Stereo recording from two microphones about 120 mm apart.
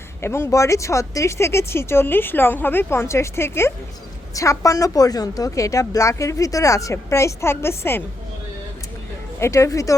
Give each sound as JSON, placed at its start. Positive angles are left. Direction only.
{"t": 0.2, "sound": "a woman's voice", "side_deg": 20}
{"t": 9.4, "sound": "a woman's voice", "side_deg": 25}